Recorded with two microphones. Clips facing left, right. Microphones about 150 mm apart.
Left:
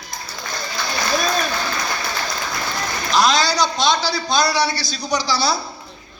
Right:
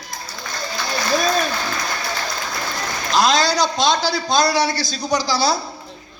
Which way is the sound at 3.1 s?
45° right (ahead or behind).